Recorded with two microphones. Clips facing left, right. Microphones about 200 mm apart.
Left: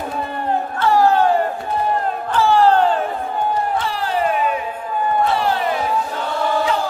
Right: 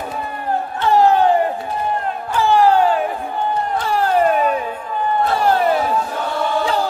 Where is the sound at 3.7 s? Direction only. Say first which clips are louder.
Right 4 dB; 45° right (ahead or behind).